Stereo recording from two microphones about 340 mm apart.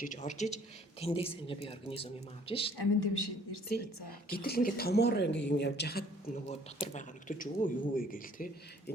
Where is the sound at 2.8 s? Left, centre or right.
Left.